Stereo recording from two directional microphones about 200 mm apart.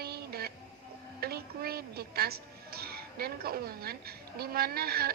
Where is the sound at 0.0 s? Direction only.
50° right (ahead or behind).